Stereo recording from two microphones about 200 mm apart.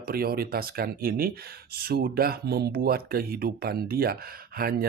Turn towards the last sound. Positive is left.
turn(degrees=-50)  # may be behind; listen again after turning